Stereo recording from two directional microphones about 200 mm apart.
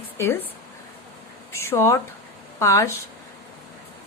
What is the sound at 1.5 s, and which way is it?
Speech, 15° left (ahead or behind).